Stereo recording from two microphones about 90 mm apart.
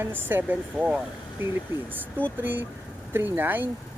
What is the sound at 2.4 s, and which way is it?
Speech, 20° right (ahead or behind).